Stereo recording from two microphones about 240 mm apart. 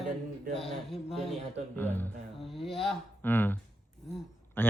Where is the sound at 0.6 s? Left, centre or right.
Centre.